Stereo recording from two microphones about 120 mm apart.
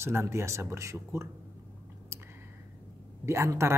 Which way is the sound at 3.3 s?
25° right (ahead or behind).